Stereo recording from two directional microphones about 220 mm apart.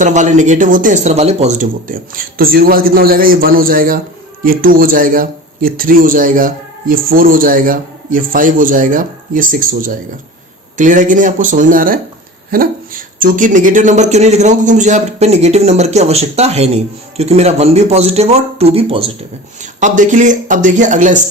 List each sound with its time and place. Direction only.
0.0 s a man's voice: 35° right (ahead or behind)